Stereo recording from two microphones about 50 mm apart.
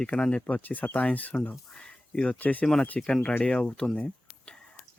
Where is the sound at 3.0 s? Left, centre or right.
Centre.